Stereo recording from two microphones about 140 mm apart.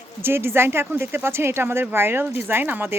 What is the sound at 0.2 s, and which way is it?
Speech, 15° right (ahead or behind).